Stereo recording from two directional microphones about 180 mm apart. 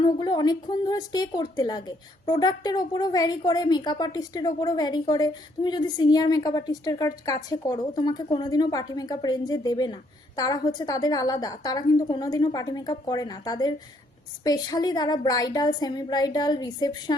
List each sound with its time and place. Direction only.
0.0 s a woman's voice: 25° left (ahead or behind)